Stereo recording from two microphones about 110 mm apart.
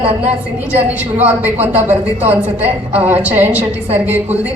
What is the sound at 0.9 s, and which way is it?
Speech, 15° right (ahead or behind).